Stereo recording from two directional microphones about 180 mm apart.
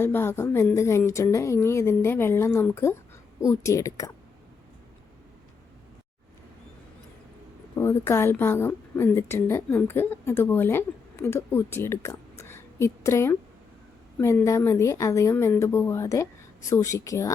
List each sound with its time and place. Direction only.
0.0 s a woman's voice: 10° left (ahead or behind)
7.8 s a woman's voice: 15° left (ahead or behind)